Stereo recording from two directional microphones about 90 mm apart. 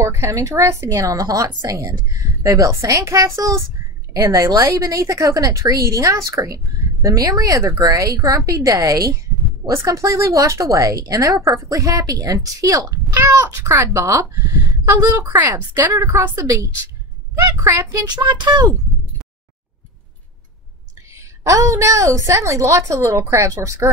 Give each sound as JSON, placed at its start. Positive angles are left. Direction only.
{"t": 0.0, "sound": "a woman's voice", "side_deg": -30}
{"t": 18.1, "sound": "speech", "side_deg": -55}
{"t": 21.1, "sound": "speech", "side_deg": -35}